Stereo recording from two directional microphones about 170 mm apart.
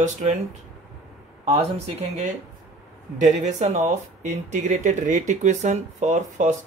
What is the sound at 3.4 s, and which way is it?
Speech, 40° right (ahead or behind).